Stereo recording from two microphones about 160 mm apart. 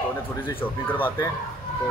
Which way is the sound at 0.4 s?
10° left (ahead or behind).